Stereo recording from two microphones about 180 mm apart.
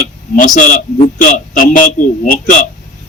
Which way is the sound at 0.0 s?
50° left (ahead or behind).